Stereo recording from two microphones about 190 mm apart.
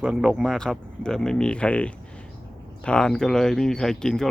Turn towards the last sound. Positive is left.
turn(degrees=5)  # may be behind; listen again after turning